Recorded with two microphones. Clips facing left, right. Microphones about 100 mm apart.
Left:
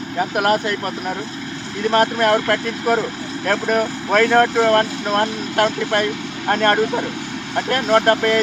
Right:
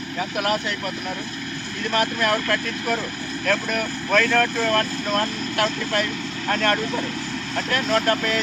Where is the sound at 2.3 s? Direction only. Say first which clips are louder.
Left 5 dB; 30° left (ahead or behind).